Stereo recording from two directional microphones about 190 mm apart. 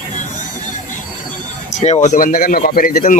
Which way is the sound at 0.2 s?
40° left (ahead or behind).